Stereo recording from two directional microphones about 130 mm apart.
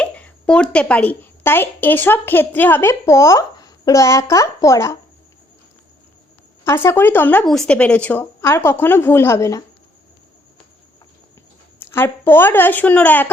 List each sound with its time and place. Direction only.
0.0 s a woman's voice: 10° left (ahead or behind)
6.7 s a woman's voice: 20° left (ahead or behind)
7.4 s a woman's voice: 5° left (ahead or behind); by 9.6 s 25° left (ahead or behind)
11.8 s a woman's voice: 20° left (ahead or behind)